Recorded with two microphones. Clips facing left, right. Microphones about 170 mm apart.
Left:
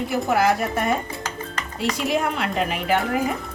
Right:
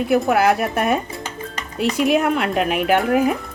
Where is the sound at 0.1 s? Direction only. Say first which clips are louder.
Right 4 dB; 60° right (ahead or behind).